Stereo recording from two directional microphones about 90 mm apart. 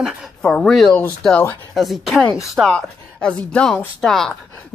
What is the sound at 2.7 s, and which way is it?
Speech, 10° left (ahead or behind).